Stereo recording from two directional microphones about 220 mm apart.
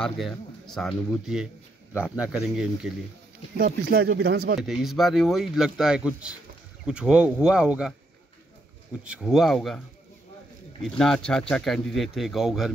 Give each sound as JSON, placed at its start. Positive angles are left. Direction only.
{"t": 0.0, "sound": "speech", "side_deg": 0}
{"t": 3.5, "sound": "speech", "side_deg": -45}
{"t": 4.6, "sound": "speech", "side_deg": 0}
{"t": 9.0, "sound": "speech", "side_deg": -5}
{"t": 10.8, "sound": "speech", "side_deg": 5}